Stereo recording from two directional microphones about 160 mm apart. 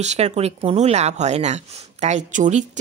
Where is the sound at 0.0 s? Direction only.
45° right (ahead or behind).